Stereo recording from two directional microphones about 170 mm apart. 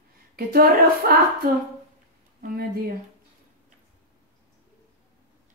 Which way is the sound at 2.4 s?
60° right (ahead or behind).